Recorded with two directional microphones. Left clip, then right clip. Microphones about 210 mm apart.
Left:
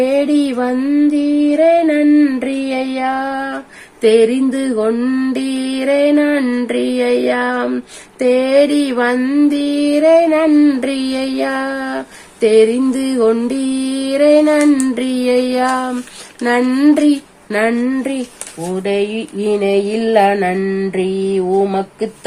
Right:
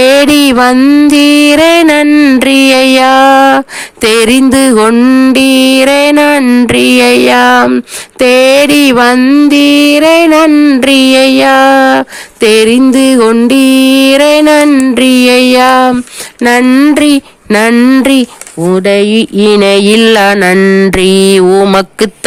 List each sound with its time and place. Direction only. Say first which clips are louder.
0.0 s mantra: right 10 dB; 45° right (ahead or behind)
8.2 s a sound: right 7 dB; 45° right (ahead or behind)
16.4 s mantra: right 8 dB; 40° right (ahead or behind)